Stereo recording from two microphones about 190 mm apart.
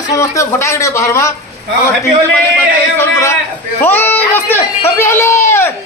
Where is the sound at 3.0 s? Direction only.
15° left (ahead or behind).